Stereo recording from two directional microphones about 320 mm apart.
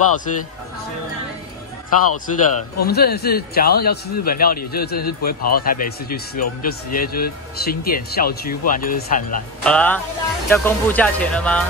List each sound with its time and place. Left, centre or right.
2.0 s a man's voice: left
2.9 s a man's voice: left
9.6 s speech: centre